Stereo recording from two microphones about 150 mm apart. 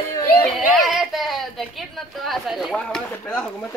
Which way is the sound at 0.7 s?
Centre (ahead or behind).